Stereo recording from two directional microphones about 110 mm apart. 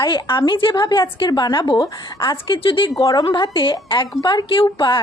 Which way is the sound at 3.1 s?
40° left (ahead or behind).